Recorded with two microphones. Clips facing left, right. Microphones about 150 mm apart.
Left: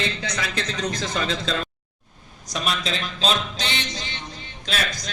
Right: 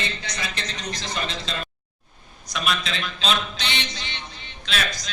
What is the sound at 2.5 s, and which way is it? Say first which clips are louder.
A man's voice: left 1 dB; 40° left (ahead or behind).